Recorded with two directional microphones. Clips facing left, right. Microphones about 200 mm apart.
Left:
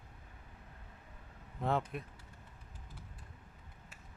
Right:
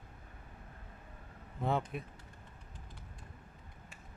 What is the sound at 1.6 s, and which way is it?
Speech, centre (ahead or behind).